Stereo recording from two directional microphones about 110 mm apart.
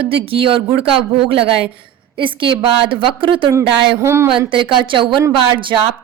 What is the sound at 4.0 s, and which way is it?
Speech, 25° right (ahead or behind).